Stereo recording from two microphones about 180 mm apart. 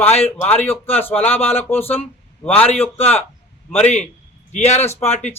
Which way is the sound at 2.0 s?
35° left (ahead or behind).